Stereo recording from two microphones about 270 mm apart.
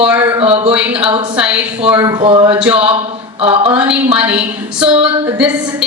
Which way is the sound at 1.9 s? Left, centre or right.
Centre.